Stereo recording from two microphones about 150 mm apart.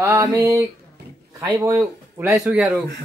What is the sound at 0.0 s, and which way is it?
Speech, 15° right (ahead or behind).